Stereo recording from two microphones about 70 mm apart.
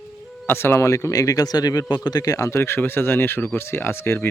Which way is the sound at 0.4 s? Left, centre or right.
Left.